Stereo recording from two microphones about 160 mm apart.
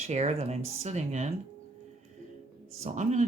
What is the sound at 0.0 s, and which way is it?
Speech, 45° right (ahead or behind).